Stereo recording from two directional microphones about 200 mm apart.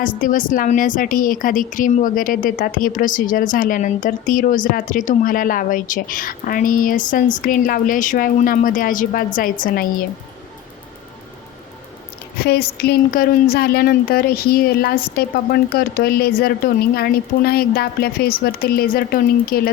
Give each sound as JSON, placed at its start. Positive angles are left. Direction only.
{"t": 0.2, "sound": "speech", "side_deg": 40}
{"t": 12.4, "sound": "speech", "side_deg": 50}